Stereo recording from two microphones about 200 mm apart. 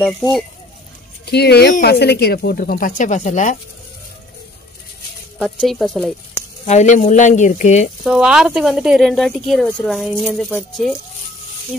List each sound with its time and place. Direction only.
1.3 s speech: 55° left (ahead or behind); by 3.5 s 35° left (ahead or behind)
5.4 s speech: 5° left (ahead or behind)
6.6 s speech: 35° left (ahead or behind)
8.0 s speech: 5° right (ahead or behind)